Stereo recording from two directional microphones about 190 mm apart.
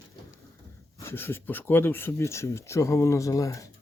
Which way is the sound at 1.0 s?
10° left (ahead or behind).